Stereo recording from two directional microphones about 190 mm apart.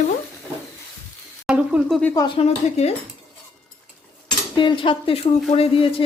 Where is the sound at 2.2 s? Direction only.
25° left (ahead or behind).